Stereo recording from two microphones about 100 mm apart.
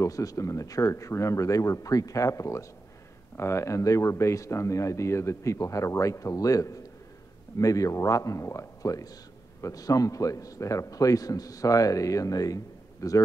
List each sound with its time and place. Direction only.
0.0 s speech: 35° left (ahead or behind)